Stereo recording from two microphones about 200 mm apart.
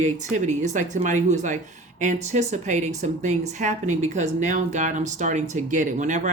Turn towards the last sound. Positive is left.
turn(degrees=-40)  # may be behind; listen again after turning